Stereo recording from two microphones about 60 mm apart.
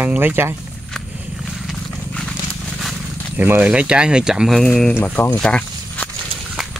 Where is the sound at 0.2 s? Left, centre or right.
Right.